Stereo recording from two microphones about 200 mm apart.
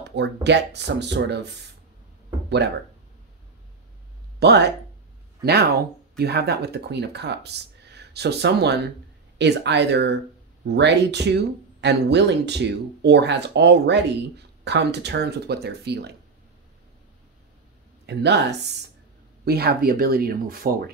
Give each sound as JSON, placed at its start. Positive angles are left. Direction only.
{"t": 0.0, "sound": "speech", "side_deg": -60}
{"t": 4.4, "sound": "speech", "side_deg": -55}
{"t": 18.0, "sound": "speech", "side_deg": -60}